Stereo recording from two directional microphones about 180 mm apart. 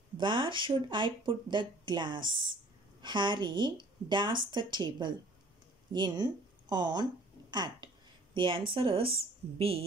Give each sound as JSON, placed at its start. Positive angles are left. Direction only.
{"t": 0.2, "sound": "a woman's voice", "side_deg": -25}